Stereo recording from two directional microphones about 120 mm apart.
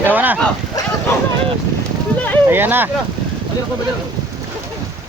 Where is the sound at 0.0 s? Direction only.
15° right (ahead or behind).